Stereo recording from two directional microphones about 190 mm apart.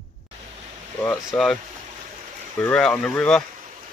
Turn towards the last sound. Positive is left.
turn(degrees=5)  # may be behind; listen again after turning